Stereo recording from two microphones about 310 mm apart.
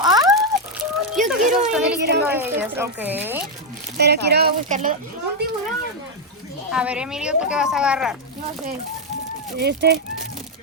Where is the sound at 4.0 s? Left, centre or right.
Right.